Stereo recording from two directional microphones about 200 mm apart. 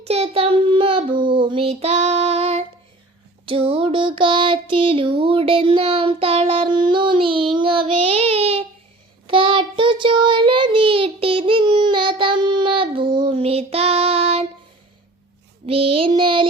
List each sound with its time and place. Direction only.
0.0 s child singing: 30° right (ahead or behind)
15.6 s child singing: 30° right (ahead or behind)